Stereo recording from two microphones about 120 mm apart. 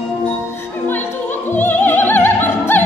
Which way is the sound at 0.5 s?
20° left (ahead or behind).